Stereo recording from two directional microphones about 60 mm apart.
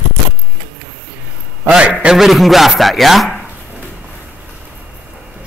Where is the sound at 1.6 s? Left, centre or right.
Centre.